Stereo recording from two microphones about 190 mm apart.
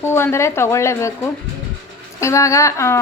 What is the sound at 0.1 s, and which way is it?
Speech, 15° left (ahead or behind).